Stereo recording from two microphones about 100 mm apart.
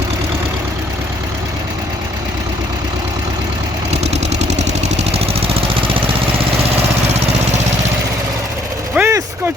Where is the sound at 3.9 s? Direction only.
90° right; by 6.0 s 65° right (ahead or behind).